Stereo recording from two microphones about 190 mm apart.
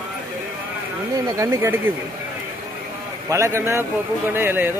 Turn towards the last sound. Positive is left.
turn(degrees=-10)  # may be behind; listen again after turning